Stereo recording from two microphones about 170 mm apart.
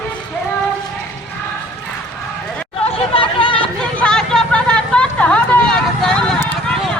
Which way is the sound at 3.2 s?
30° left (ahead or behind).